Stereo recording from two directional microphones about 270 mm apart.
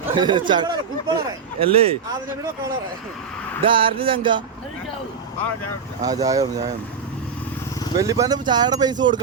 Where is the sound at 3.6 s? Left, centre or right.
Centre.